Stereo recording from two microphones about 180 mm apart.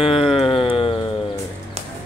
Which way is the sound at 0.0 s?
30° left (ahead or behind).